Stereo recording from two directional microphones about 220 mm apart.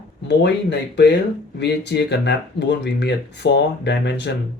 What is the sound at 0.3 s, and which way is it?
Speech, 50° left (ahead or behind).